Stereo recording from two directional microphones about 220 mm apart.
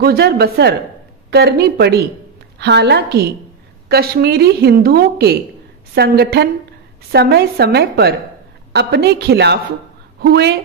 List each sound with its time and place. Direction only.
0.0 s a woman's voice: 45° right (ahead or behind)